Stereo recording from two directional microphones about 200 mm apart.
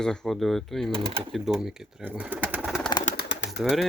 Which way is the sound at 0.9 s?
25° right (ahead or behind).